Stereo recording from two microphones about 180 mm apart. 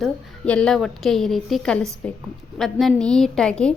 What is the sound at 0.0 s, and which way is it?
A woman's voice, 5° left (ahead or behind).